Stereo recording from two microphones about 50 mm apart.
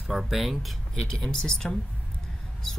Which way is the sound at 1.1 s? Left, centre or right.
Centre.